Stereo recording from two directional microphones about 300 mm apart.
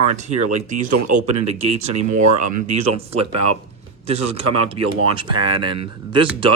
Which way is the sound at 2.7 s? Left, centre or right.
Right.